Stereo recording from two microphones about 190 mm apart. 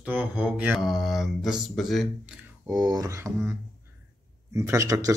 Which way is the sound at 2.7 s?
20° right (ahead or behind).